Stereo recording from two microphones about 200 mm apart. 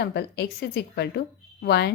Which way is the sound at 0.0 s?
55° left (ahead or behind).